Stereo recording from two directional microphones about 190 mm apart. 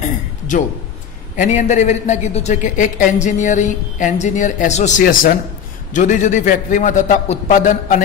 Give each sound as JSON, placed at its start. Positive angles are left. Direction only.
{"t": 1.3, "sound": "a man's voice", "side_deg": 40}